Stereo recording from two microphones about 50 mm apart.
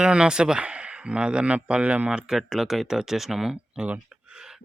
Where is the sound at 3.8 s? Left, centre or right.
Right.